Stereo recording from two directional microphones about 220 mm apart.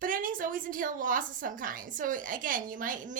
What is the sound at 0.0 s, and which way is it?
A woman's voice, 40° right (ahead or behind).